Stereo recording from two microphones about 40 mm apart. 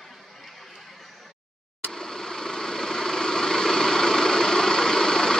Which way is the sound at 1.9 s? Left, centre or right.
Centre.